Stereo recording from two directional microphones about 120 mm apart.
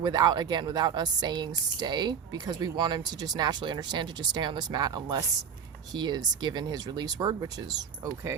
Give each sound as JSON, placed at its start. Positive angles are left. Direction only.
{"t": 0.0, "sound": "speech", "side_deg": -35}